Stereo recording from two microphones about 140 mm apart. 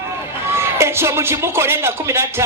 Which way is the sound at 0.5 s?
20° right (ahead or behind).